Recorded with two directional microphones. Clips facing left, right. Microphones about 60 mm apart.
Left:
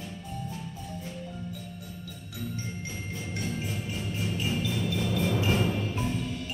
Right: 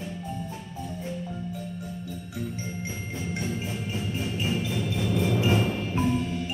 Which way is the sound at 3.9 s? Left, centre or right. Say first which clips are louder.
Right 2 dB; centre.